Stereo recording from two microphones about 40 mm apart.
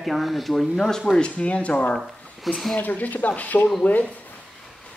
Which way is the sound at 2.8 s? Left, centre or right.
Left.